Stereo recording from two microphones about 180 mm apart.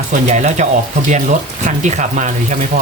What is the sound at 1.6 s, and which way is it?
Speech, 40° right (ahead or behind).